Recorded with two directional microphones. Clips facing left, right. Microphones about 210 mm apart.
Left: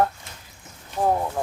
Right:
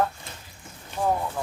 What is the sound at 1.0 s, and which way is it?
Speech, 30° left (ahead or behind).